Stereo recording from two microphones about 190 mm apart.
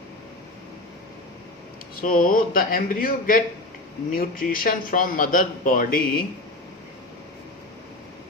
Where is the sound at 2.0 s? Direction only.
45° left (ahead or behind).